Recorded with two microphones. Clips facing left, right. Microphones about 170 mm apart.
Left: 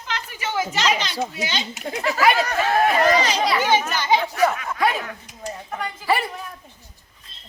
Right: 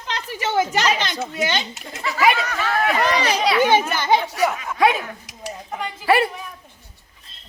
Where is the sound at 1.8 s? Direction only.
60° left (ahead or behind).